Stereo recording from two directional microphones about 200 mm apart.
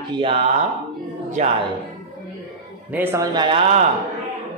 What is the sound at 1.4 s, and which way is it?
Speech, 35° right (ahead or behind).